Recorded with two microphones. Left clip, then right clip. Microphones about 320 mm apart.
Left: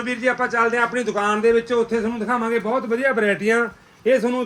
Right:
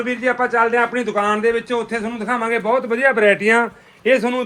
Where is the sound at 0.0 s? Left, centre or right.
Centre.